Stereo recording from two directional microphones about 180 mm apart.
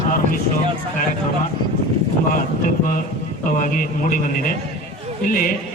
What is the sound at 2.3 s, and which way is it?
A man's voice, 50° left (ahead or behind).